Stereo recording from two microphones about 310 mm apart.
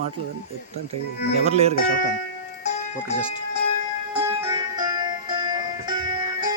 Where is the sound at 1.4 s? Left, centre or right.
Right.